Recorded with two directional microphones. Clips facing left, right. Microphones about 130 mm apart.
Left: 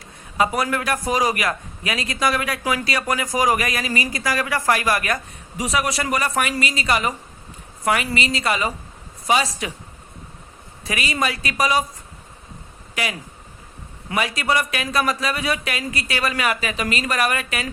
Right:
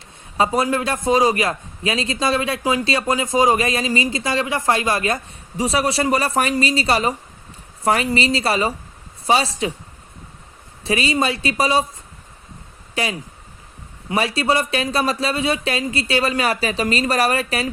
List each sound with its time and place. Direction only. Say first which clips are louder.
0.3 s a man's voice: right 2 dB; 25° right (ahead or behind)
10.8 s a man's voice: right 4 dB; 30° right (ahead or behind)
12.9 s a man's voice: right 3 dB; 30° right (ahead or behind)